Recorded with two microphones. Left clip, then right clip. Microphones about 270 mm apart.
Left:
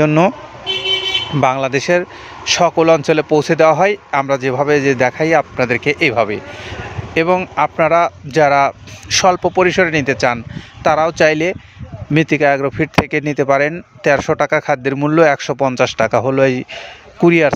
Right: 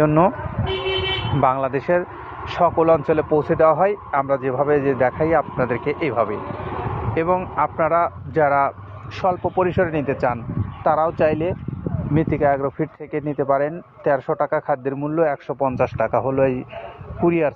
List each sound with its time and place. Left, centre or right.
0.0 s speech: left
1.4 s speech: left